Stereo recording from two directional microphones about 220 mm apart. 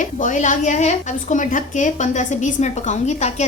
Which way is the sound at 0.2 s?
35° left (ahead or behind).